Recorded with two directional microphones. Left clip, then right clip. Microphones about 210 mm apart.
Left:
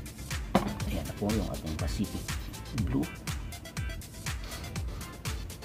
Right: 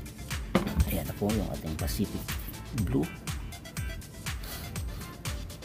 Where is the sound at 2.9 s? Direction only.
Centre (ahead or behind).